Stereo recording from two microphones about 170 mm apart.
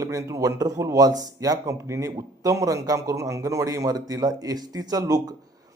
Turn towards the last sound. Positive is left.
turn(degrees=-20)  # may be behind; listen again after turning